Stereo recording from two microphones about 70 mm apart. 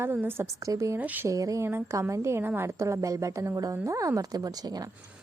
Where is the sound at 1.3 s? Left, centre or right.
Right.